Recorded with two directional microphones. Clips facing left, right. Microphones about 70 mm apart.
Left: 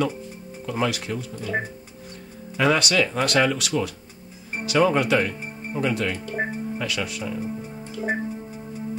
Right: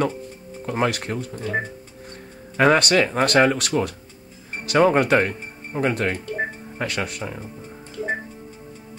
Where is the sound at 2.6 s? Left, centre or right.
Right.